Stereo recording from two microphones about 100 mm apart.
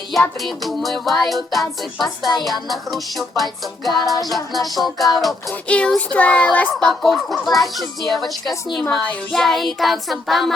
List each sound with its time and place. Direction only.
0.3 s a child's voice: centre (ahead or behind)
2.0 s music: 45° left (ahead or behind)
2.4 s a child's voice: centre (ahead or behind)
5.6 s a child's voice: 10° left (ahead or behind)